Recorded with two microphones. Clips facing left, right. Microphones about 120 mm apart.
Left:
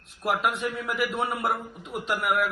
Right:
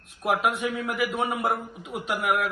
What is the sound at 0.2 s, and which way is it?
A man's voice, 5° right (ahead or behind).